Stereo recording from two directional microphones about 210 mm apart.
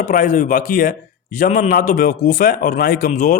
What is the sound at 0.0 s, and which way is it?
A man's voice, 40° left (ahead or behind).